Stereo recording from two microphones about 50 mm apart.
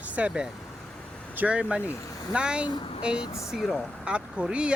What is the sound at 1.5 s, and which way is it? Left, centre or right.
Speech, right.